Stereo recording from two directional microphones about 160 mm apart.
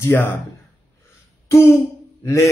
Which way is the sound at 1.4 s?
15° left (ahead or behind).